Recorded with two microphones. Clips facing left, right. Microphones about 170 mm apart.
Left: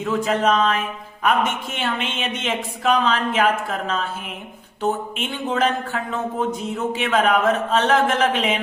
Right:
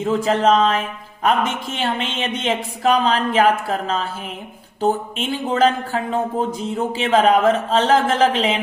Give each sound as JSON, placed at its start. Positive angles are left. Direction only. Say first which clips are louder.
{"t": 0.0, "sound": "speech", "louder": "right 3 dB", "side_deg": -30}